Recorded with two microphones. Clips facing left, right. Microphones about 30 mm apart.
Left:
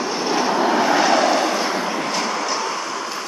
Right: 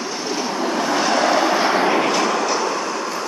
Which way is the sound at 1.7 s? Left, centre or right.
Right.